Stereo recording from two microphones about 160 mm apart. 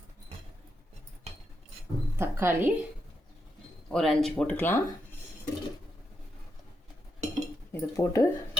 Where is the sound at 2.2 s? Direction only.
15° right (ahead or behind).